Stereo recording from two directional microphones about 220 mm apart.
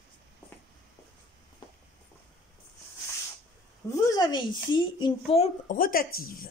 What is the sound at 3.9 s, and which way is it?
Speech, 20° left (ahead or behind).